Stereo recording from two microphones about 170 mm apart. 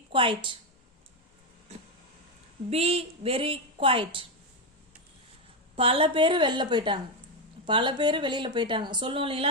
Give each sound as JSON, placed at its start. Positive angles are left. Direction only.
{"t": 0.1, "sound": "a woman's voice", "side_deg": -30}
{"t": 2.6, "sound": "a woman's voice", "side_deg": -35}
{"t": 5.7, "sound": "speech", "side_deg": -35}